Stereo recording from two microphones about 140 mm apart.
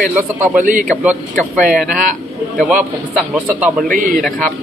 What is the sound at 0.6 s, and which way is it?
Speech, 70° right (ahead or behind).